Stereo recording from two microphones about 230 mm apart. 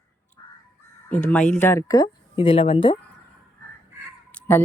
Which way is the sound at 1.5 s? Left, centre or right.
Centre.